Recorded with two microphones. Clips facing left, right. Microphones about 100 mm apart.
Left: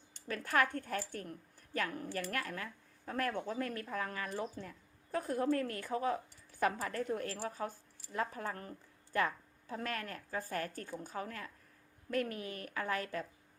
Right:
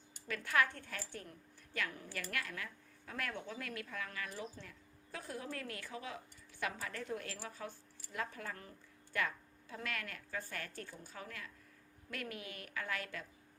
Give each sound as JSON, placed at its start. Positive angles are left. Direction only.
{"t": 0.3, "sound": "a woman's voice", "side_deg": 40}